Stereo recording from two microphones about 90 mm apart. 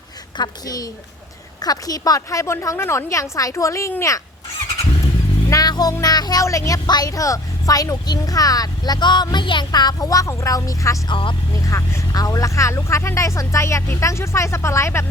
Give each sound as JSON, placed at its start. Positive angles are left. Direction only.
{"t": 0.3, "sound": "a woman's voice", "side_deg": 50}
{"t": 5.5, "sound": "a sound", "side_deg": 45}
{"t": 6.0, "sound": "speech", "side_deg": 50}
{"t": 6.8, "sound": "a woman's voice", "side_deg": 45}
{"t": 11.1, "sound": "speech", "side_deg": 70}
{"t": 11.6, "sound": "speech", "side_deg": 35}